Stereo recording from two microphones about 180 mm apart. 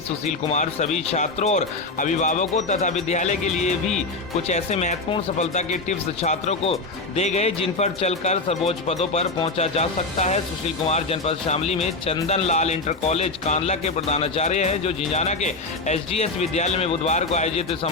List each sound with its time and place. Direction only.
0.3 s speech: 40° left (ahead or behind)